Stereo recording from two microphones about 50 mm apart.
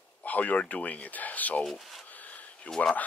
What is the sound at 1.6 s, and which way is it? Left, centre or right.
Speech, centre.